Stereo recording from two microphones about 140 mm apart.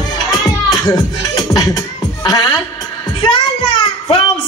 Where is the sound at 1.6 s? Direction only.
25° left (ahead or behind).